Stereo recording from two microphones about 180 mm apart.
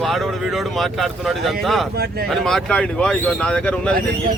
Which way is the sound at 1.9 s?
60° right (ahead or behind).